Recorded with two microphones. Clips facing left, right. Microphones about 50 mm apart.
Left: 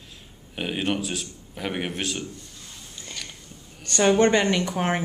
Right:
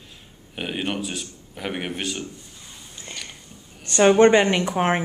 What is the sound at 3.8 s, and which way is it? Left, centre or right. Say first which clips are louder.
A woman's voice: right 4 dB; centre.